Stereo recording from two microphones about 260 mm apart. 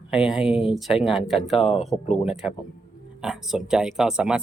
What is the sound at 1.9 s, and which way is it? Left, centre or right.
Speech, left.